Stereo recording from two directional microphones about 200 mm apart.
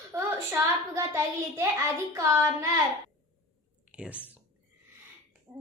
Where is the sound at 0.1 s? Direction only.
15° right (ahead or behind).